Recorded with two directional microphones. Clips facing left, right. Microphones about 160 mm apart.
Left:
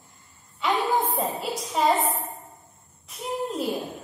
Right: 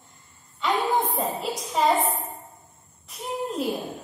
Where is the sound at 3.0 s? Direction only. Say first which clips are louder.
Left 1 dB; centre (ahead or behind).